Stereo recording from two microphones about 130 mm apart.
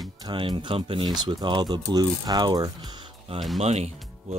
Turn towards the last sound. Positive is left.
turn(degrees=-55)  # may be behind; listen again after turning